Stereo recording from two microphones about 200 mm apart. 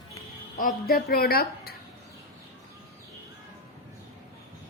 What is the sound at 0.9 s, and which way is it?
Speech, 50° left (ahead or behind).